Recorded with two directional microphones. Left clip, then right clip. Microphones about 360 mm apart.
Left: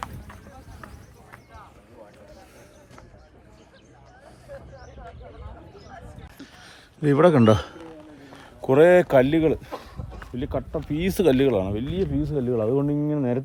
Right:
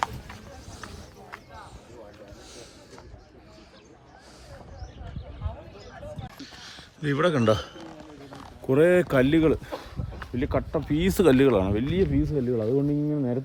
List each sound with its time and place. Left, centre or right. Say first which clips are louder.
6.3 s a sound: right 3 dB; centre
8.6 s speech: left 5 dB; centre
12.2 s speech: left 2 dB; centre
13.1 s speech: left 3 dB; centre